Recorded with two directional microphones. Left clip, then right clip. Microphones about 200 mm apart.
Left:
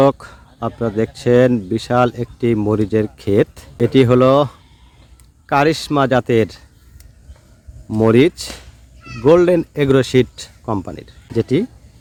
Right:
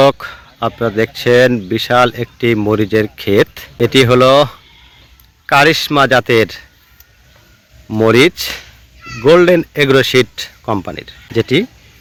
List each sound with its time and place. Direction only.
0.0 s a man's voice: centre (ahead or behind)
7.9 s speech: 10° right (ahead or behind)